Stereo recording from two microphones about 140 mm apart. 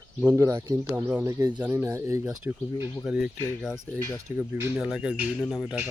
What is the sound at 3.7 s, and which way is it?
Speech, 20° left (ahead or behind).